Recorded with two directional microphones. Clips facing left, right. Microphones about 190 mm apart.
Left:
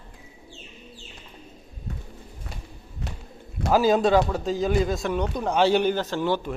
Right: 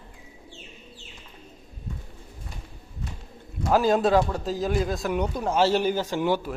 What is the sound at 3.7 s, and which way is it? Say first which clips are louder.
Speech: left 1 dB; centre (ahead or behind).